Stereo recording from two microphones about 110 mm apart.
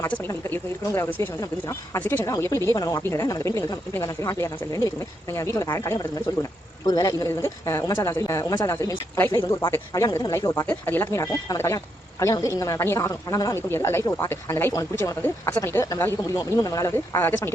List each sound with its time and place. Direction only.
0.3 s a woman's voice: 20° left (ahead or behind)
2.2 s a woman's voice: 25° left (ahead or behind)
15.2 s a woman's voice: 20° left (ahead or behind)